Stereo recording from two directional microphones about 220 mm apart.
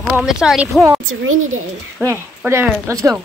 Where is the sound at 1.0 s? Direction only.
70° right (ahead or behind).